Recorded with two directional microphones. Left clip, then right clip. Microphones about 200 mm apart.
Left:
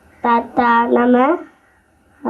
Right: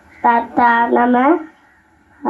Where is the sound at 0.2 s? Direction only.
25° right (ahead or behind).